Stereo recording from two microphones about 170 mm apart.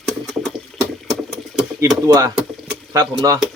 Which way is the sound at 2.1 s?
20° right (ahead or behind).